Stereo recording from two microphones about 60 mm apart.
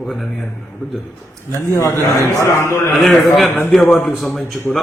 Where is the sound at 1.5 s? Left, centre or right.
Left.